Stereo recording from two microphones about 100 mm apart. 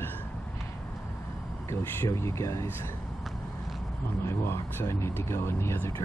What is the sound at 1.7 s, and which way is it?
Speech, 30° left (ahead or behind).